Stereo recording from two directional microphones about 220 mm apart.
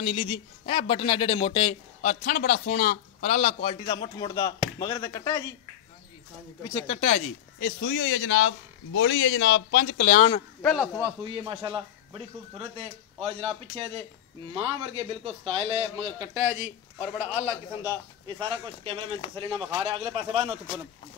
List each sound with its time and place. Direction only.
0.0 s speech: 25° left (ahead or behind)
2.0 s a man's voice: 40° left (ahead or behind); by 5.5 s 15° left (ahead or behind)
6.7 s speech: 20° left (ahead or behind)
7.1 s a man's voice: 35° left (ahead or behind)
7.8 s speech: 50° left (ahead or behind)
10.6 s a man's voice: centre (ahead or behind)
11.0 s a man's voice: 15° right (ahead or behind)
18.2 s a man's voice: 20° right (ahead or behind)